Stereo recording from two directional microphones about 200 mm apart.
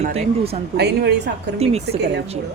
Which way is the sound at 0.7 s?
55° right (ahead or behind).